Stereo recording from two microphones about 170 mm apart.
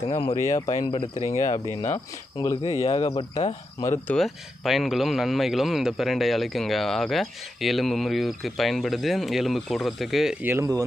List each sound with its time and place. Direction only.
0.1 s speech: 35° left (ahead or behind)
0.4 s speech: 20° left (ahead or behind)
0.7 s speech: 35° left (ahead or behind)
2.3 s speech: 15° left (ahead or behind)
2.8 s speech: 35° left (ahead or behind)
3.8 s speech: 15° left (ahead or behind)
4.2 s speech: centre (ahead or behind)
10.5 s speech: 20° right (ahead or behind)